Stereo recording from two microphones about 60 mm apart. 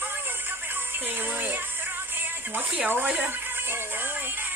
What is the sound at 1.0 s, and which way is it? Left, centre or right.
Speech, right.